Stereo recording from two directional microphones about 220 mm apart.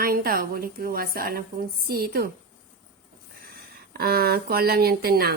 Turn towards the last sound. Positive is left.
turn(degrees=-45)  # may be behind; listen again after turning